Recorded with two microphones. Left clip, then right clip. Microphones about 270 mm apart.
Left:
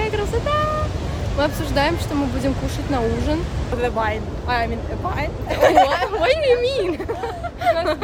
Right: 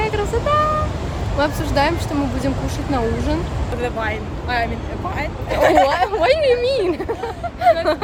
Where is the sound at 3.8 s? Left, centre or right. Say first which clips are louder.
Left 2 dB; left.